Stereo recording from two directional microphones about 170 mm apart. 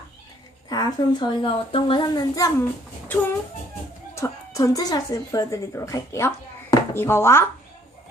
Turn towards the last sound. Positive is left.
turn(degrees=15)  # may be behind; listen again after turning